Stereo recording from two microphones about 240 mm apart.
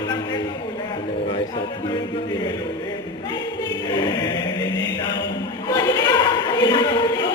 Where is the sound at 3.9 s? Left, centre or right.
Centre.